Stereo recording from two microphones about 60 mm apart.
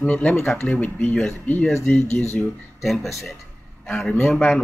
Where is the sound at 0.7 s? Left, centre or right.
Left.